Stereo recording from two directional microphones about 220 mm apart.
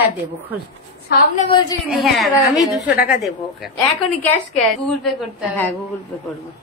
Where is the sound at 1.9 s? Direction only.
Centre (ahead or behind).